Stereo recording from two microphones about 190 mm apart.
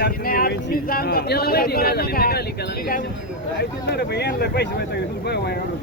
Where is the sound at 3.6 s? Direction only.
60° left (ahead or behind).